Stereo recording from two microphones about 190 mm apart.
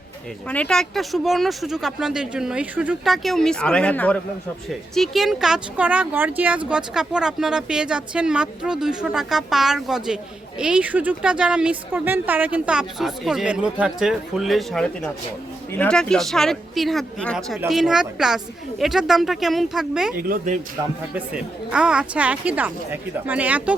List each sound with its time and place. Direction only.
0.4 s a woman's voice: 5° left (ahead or behind)
20.1 s speech: 50° right (ahead or behind)
21.3 s speech: 5° right (ahead or behind)